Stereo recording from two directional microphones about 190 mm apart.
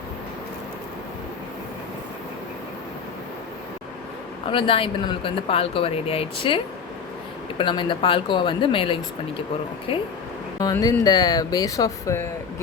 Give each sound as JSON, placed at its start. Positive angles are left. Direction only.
{"t": 4.4, "sound": "speech", "side_deg": 25}
{"t": 7.6, "sound": "speech", "side_deg": 25}